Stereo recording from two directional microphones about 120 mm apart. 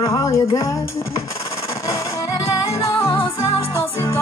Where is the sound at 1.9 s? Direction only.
25° left (ahead or behind).